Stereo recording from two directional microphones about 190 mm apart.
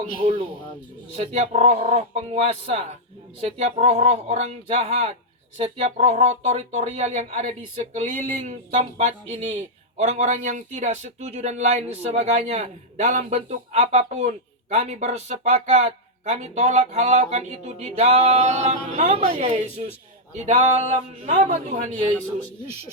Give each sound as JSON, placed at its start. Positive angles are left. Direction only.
{"t": 1.1, "sound": "speech", "side_deg": -35}